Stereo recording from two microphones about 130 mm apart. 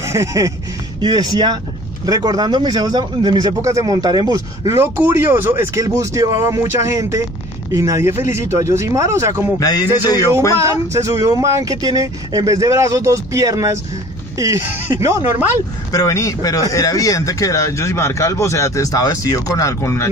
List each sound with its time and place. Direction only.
0.0 s music: 20° right (ahead or behind)
1.0 s speech: 30° right (ahead or behind)
9.6 s speech: 30° left (ahead or behind)
10.6 s speech: 25° right (ahead or behind)
15.9 s speech: 25° left (ahead or behind)